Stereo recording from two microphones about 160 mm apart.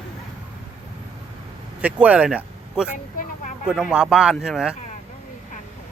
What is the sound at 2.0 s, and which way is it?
Speech, 10° right (ahead or behind).